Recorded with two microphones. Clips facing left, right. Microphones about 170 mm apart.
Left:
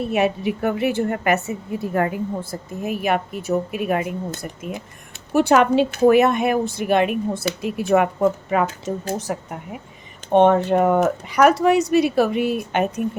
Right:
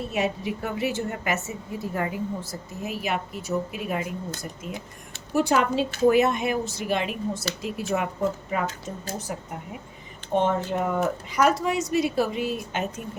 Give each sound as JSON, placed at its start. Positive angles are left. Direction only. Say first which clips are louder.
{"t": 0.0, "sound": "a woman's voice", "louder": "left 7 dB", "side_deg": 65}